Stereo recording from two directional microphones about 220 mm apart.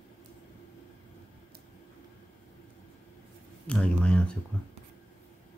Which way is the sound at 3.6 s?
5° left (ahead or behind).